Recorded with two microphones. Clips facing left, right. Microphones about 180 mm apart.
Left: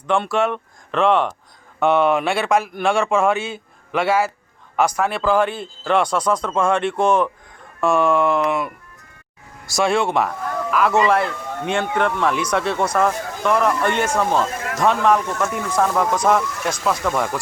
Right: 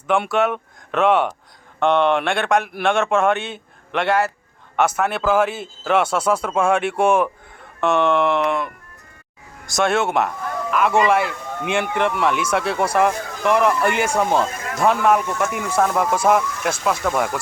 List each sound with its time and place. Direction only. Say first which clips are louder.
0.1 s a man's voice: even; centre (ahead or behind)
9.7 s a man's voice: even; centre (ahead or behind)